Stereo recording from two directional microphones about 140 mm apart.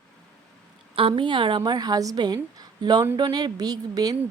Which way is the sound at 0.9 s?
40° right (ahead or behind).